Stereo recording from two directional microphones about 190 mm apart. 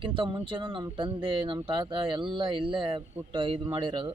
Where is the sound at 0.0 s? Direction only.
25° right (ahead or behind).